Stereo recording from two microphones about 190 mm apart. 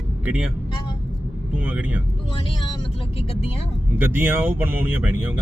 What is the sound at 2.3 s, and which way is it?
Speech, 25° left (ahead or behind).